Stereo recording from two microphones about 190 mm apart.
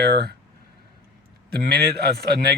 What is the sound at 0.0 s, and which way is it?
Speech, 55° right (ahead or behind).